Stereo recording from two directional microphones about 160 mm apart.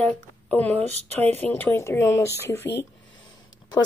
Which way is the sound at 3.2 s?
25° left (ahead or behind).